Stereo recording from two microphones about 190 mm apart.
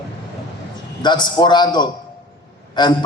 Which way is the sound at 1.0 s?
25° left (ahead or behind).